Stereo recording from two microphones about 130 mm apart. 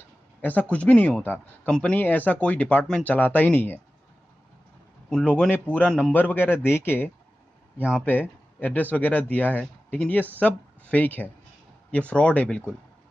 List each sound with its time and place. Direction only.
0.4 s speech: 15° left (ahead or behind)
5.1 s speech: 10° left (ahead or behind)
7.7 s speech: 10° right (ahead or behind)
8.0 s speech: 15° left (ahead or behind)